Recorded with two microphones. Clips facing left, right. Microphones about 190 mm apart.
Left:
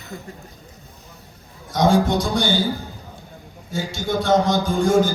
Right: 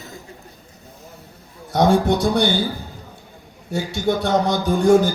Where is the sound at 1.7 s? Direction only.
60° right (ahead or behind).